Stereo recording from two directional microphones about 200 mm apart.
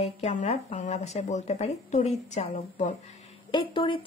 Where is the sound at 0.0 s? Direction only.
35° left (ahead or behind).